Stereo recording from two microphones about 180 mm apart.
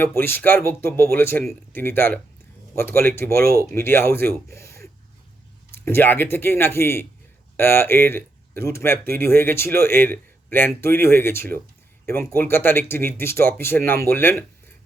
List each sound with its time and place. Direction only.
0.0 s speech: 10° left (ahead or behind)
4.5 s a sound: 15° left (ahead or behind)
5.7 s speech: 10° left (ahead or behind)